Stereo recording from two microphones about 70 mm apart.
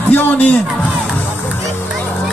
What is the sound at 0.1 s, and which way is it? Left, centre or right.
Speech, left.